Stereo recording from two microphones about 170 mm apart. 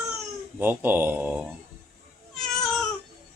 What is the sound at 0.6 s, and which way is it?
Speech, 10° right (ahead or behind).